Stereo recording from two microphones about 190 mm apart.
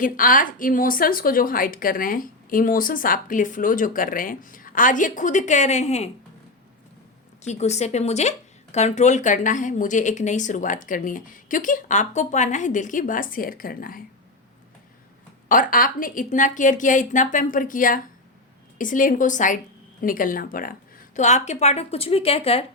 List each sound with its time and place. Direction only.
0.0 s a woman's voice: 45° left (ahead or behind)
7.4 s speech: 35° left (ahead or behind)
15.4 s a woman's voice: 45° left (ahead or behind)
21.2 s speech: 40° left (ahead or behind)